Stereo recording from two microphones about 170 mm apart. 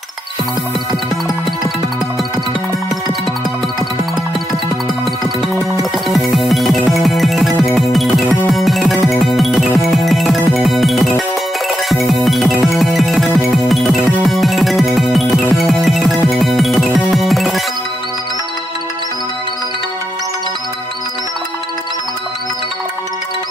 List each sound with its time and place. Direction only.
5.8 s music: centre (ahead or behind)